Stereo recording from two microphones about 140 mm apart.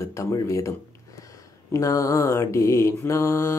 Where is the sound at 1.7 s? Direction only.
25° left (ahead or behind).